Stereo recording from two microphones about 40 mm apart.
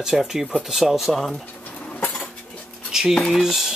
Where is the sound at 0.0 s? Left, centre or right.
Centre.